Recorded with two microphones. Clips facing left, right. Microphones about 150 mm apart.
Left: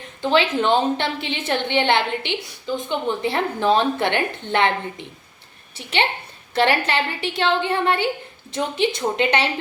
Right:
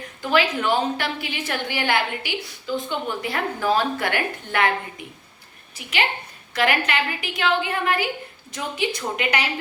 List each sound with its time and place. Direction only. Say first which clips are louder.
0.2 s a woman's voice: left 3 dB; 25° left (ahead or behind)